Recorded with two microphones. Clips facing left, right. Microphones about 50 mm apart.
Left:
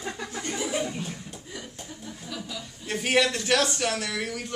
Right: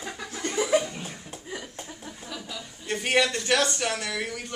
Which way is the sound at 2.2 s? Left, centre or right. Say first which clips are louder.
Left 1 dB; centre.